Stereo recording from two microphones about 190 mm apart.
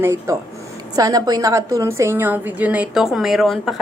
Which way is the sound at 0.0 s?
15° right (ahead or behind).